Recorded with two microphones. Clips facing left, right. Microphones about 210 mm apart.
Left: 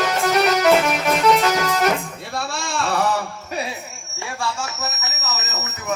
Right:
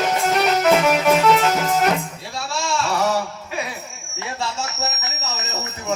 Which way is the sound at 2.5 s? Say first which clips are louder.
Right 4 dB; 55° left (ahead or behind).